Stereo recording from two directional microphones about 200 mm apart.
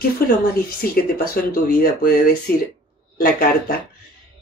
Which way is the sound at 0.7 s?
50° left (ahead or behind).